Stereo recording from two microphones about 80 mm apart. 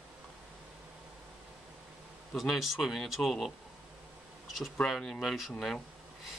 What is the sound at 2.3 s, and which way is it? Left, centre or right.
Speech, centre.